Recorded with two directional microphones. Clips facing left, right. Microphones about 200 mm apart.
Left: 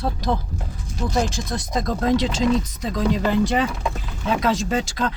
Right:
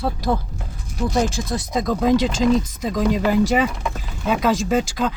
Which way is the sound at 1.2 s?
Centre (ahead or behind).